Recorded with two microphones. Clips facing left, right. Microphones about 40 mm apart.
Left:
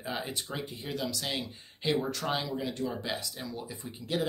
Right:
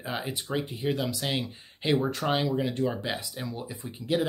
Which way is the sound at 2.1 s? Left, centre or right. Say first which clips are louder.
Right 5 dB; right.